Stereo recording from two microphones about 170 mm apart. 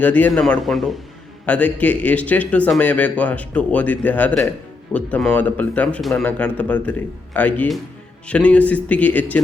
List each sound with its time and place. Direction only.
0.0 s a man's voice: 10° left (ahead or behind)